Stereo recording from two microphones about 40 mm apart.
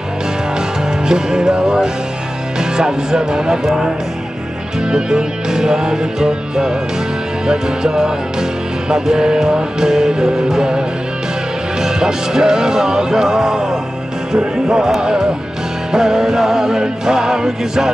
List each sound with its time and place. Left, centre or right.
0.6 s music: centre
14.3 s speech: centre
15.9 s music: centre